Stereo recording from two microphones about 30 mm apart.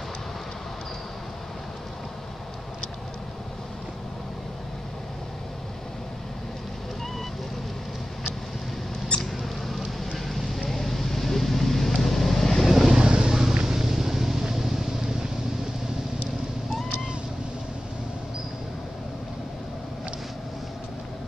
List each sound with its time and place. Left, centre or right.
9.1 s rodents: left
10.1 s a sound: centre
10.7 s vehicle: centre
12.6 s vehicle: centre
13.3 s vehicle: centre